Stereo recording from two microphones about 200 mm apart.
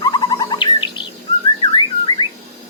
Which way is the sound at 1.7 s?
20° left (ahead or behind).